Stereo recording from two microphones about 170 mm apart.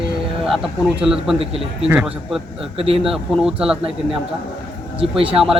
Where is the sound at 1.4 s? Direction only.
35° right (ahead or behind).